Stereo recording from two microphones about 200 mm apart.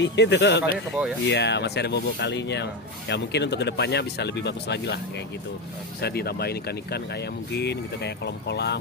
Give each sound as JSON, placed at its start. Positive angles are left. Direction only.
{"t": 0.0, "sound": "speech", "side_deg": 60}